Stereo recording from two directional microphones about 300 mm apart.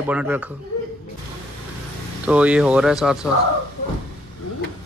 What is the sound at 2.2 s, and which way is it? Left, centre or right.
Speech, centre.